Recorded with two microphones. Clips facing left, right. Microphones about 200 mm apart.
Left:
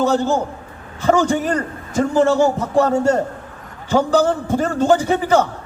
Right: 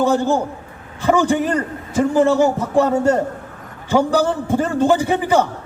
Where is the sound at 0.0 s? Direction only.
10° right (ahead or behind).